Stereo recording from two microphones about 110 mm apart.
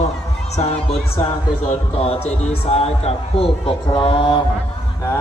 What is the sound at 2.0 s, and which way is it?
A man's voice, 65° left (ahead or behind).